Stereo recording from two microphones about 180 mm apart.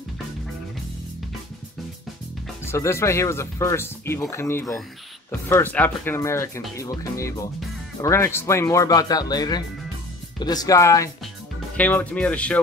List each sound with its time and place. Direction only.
2.6 s speech: 15° left (ahead or behind)